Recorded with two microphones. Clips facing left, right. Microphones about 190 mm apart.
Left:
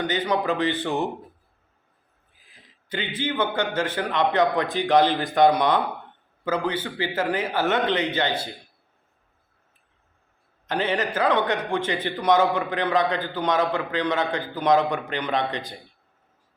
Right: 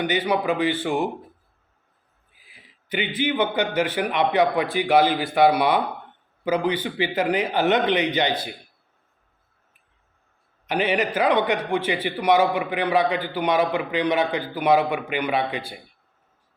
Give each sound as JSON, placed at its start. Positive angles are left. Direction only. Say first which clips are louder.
{"t": 0.0, "sound": "a man's voice", "louder": "right 2 dB", "side_deg": -10}
{"t": 2.5, "sound": "a sound", "louder": "right 3 dB", "side_deg": -10}
{"t": 3.2, "sound": "a man's voice", "louder": "right 2 dB", "side_deg": -15}
{"t": 10.7, "sound": "a man's voice", "louder": "right 2 dB", "side_deg": -15}